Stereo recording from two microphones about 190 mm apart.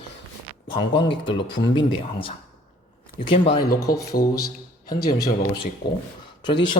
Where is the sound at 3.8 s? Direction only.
15° left (ahead or behind).